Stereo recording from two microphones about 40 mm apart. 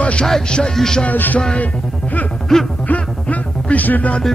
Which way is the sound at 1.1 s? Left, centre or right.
Left.